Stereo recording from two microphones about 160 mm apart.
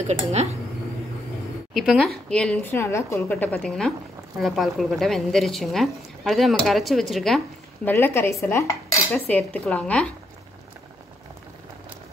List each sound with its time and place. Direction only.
0.0 s speech: 45° right (ahead or behind)
1.7 s a woman's voice: centre (ahead or behind)
7.9 s a woman's voice: 15° left (ahead or behind)
9.1 s a woman's voice: 10° left (ahead or behind)